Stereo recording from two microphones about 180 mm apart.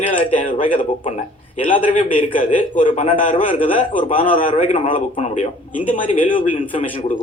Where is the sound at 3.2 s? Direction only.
30° left (ahead or behind).